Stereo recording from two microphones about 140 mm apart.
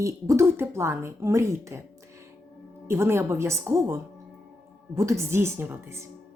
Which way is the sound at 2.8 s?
20° right (ahead or behind).